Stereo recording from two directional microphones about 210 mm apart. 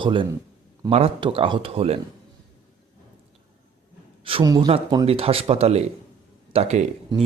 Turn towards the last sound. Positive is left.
turn(degrees=-30)  # may be behind; listen again after turning